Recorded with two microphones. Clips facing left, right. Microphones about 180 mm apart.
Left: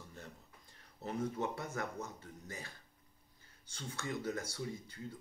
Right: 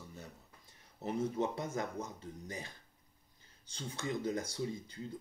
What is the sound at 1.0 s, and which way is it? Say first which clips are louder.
Speech: right 3 dB; 20° right (ahead or behind).